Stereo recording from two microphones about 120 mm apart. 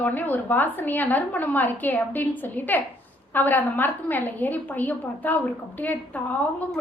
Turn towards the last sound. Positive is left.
turn(degrees=15)  # may be behind; listen again after turning